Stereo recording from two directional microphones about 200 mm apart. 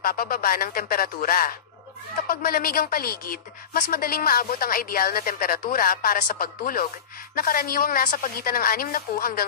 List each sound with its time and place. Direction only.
0.0 s a woman's voice: 45° left (ahead or behind)